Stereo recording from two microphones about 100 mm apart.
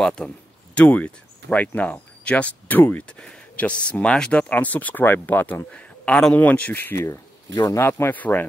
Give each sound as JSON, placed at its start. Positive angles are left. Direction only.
{"t": 0.0, "sound": "speech", "side_deg": 5}
{"t": 7.5, "sound": "speech", "side_deg": 30}